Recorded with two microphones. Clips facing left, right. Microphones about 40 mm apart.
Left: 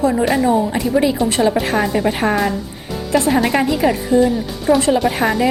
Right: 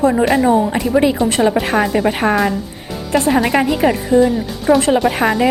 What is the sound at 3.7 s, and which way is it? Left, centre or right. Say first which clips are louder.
Speech: right 1 dB; right.